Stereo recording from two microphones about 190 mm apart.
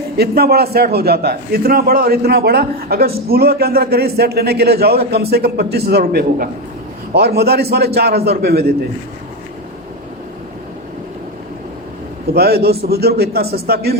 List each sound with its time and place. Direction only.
0.2 s a man's voice: 55° right (ahead or behind)
12.3 s a man's voice: 55° right (ahead or behind)